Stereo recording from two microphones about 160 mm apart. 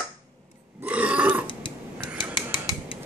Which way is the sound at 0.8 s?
10° right (ahead or behind).